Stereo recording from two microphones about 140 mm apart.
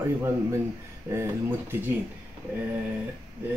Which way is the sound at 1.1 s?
20° right (ahead or behind).